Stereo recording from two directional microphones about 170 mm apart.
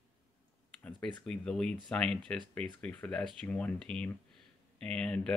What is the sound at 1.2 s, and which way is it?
Speech, 5° left (ahead or behind).